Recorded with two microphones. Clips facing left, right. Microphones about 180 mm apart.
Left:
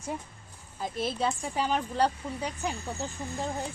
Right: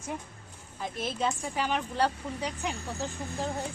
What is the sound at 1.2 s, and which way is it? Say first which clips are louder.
A woman's voice: right 1 dB; 10° left (ahead or behind).